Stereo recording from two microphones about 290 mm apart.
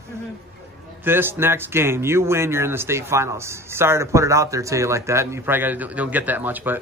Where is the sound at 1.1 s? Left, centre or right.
Centre.